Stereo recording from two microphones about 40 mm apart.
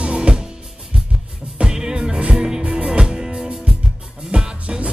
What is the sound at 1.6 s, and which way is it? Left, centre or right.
Music, centre.